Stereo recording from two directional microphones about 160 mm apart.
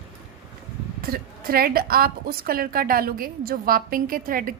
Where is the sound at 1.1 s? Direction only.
70° right (ahead or behind).